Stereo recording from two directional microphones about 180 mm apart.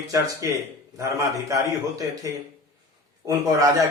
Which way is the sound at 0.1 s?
15° right (ahead or behind).